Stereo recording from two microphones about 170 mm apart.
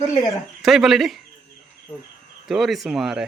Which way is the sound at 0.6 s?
Centre (ahead or behind).